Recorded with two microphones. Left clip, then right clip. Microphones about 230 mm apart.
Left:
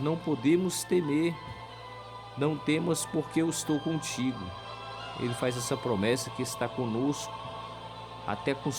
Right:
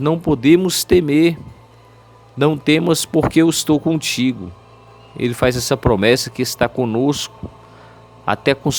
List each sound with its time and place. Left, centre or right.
0.0 s speech: right
2.4 s speech: right
8.3 s speech: right